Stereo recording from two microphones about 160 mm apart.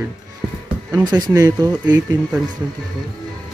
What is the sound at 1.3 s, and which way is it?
Speech, 25° right (ahead or behind).